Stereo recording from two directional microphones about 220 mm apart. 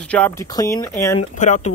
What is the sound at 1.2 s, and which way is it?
Speech, 35° left (ahead or behind).